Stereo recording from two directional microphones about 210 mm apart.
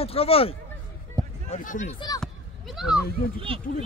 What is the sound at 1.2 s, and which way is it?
Run, 15° right (ahead or behind).